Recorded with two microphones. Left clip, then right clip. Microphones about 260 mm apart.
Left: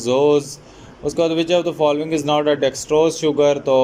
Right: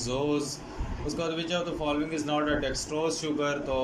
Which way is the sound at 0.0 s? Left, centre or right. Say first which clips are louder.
Left 14 dB; left.